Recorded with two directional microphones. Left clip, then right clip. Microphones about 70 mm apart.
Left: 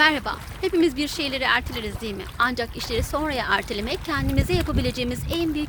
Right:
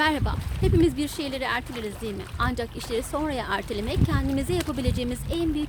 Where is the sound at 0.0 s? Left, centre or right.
Right.